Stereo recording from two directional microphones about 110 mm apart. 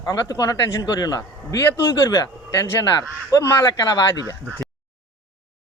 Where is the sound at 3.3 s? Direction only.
35° left (ahead or behind).